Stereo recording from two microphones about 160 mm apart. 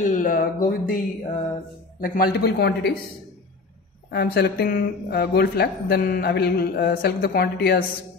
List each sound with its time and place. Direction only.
0.0 s speech: 55° left (ahead or behind); by 3.0 s 90° left
4.1 s speech: 90° left